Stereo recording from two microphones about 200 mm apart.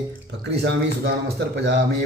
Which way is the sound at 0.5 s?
55° right (ahead or behind).